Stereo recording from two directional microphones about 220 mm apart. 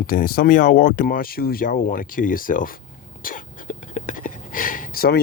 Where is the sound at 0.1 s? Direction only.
40° left (ahead or behind).